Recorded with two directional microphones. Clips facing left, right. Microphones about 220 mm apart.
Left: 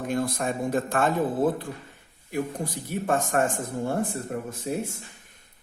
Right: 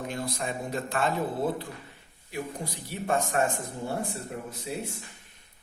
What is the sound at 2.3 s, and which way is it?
A man's voice, 50° left (ahead or behind).